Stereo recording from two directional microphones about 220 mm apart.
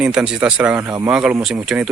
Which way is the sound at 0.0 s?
5° right (ahead or behind).